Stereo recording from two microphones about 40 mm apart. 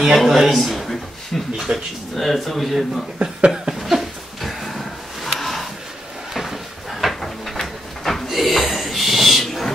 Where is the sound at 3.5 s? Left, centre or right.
Centre.